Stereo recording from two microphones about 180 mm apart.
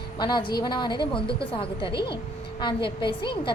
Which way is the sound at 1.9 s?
65° left (ahead or behind).